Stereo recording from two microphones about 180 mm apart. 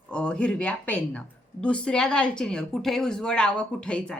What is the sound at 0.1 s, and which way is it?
A woman's voice, 5° left (ahead or behind).